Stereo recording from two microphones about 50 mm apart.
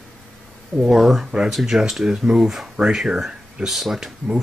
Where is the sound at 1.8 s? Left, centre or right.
Centre.